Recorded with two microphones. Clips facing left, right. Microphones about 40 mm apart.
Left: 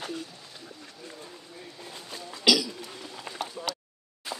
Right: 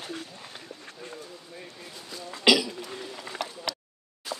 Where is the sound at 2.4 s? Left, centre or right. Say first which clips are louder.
Right 2 dB; right.